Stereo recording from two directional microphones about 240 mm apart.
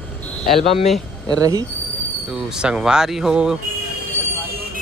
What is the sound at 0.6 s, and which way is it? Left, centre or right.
Speech, left.